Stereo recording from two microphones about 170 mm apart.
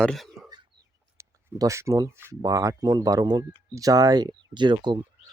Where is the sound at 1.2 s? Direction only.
20° right (ahead or behind).